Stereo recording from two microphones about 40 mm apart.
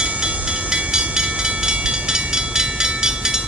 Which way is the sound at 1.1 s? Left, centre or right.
Right.